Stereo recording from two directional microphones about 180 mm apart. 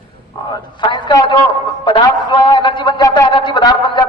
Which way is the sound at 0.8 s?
25° left (ahead or behind).